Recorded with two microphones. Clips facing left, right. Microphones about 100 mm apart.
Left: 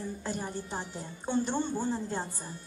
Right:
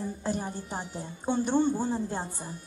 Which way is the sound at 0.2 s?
15° right (ahead or behind).